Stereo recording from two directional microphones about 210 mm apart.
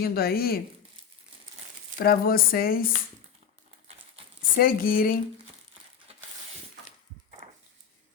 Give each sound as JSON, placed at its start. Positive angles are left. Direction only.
{"t": 0.0, "sound": "speech", "side_deg": 45}
{"t": 2.0, "sound": "speech", "side_deg": 45}
{"t": 4.5, "sound": "speech", "side_deg": 45}
{"t": 6.1, "sound": "a sound", "side_deg": -30}